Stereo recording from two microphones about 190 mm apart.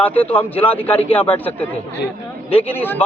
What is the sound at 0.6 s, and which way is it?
Speech, 30° left (ahead or behind).